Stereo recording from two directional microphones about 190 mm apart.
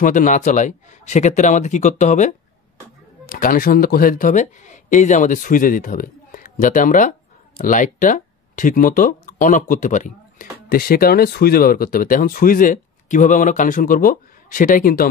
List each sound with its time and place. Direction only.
0.0 s a man's voice: 40° left (ahead or behind)